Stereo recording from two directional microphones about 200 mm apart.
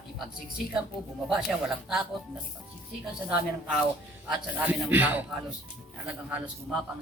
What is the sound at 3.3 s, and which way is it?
A man's voice, 5° right (ahead or behind).